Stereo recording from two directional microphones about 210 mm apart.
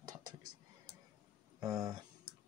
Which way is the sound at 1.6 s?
15° right (ahead or behind).